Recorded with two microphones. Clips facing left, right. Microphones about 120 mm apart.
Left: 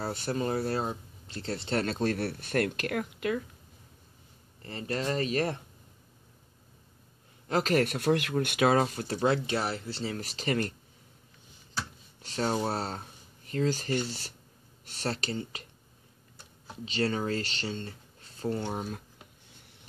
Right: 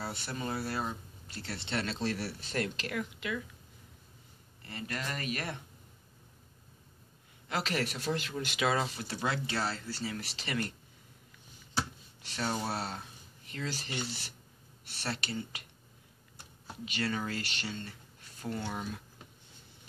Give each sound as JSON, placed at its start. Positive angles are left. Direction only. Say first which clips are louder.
{"t": 0.0, "sound": "speech", "louder": "left 7 dB", "side_deg": 40}
{"t": 4.6, "sound": "speech", "louder": "left 6 dB", "side_deg": 35}
{"t": 7.4, "sound": "speech", "louder": "left 7 dB", "side_deg": 40}
{"t": 9.2, "sound": "speech", "louder": "left 6 dB", "side_deg": 25}
{"t": 10.1, "sound": "speech", "louder": "left 6 dB", "side_deg": 40}
{"t": 12.2, "sound": "speech", "louder": "left 5 dB", "side_deg": 40}
{"t": 16.8, "sound": "speech", "louder": "left 5 dB", "side_deg": 30}